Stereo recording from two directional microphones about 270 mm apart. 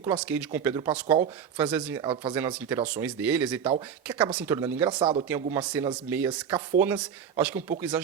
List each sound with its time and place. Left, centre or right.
0.0 s speech: centre
3.6 s speech: centre
4.0 s speech: centre
4.9 s speech: centre
5.3 s speech: centre